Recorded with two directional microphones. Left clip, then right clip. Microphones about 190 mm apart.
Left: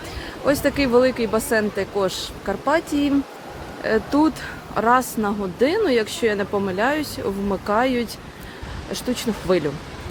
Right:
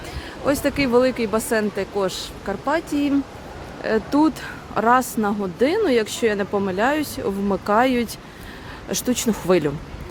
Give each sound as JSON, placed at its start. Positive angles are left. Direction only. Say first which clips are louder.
{"t": 0.4, "sound": "speech", "louder": "left 1 dB", "side_deg": -5}